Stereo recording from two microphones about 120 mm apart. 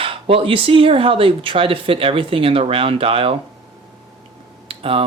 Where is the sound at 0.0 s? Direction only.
50° right (ahead or behind).